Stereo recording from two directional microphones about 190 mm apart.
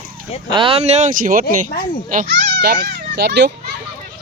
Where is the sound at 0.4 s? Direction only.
25° right (ahead or behind); by 1.4 s 45° right (ahead or behind).